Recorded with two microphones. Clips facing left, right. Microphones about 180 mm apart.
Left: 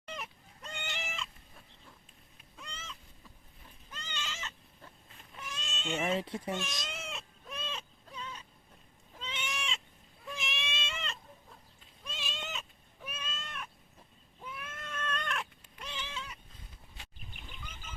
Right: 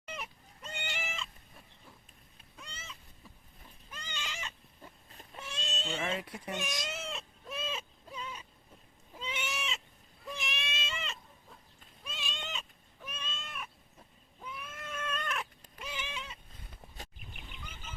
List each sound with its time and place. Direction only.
0.0 s chicken: 5° right (ahead or behind)
2.6 s cat: centre (ahead or behind)
3.9 s cat: 10° right (ahead or behind)
5.1 s goat: 30° right (ahead or behind)
6.0 s speech: 30° left (ahead or behind)
6.5 s speech: 15° right (ahead or behind)
6.9 s a sound: centre (ahead or behind)
9.1 s goat: 10° right (ahead or behind)
12.0 s cat: centre (ahead or behind); by 16.4 s 20° right (ahead or behind)